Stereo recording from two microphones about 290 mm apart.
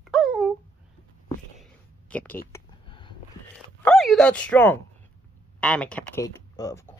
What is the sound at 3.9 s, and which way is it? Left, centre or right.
Speech, centre.